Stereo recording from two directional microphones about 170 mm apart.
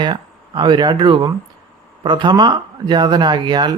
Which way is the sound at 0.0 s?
25° right (ahead or behind).